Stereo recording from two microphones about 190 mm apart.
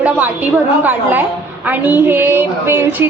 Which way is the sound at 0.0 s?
10° right (ahead or behind).